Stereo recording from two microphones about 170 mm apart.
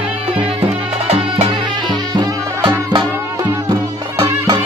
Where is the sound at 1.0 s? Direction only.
40° right (ahead or behind).